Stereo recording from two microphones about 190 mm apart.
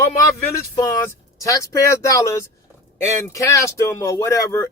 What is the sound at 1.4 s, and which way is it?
Speech, 15° left (ahead or behind).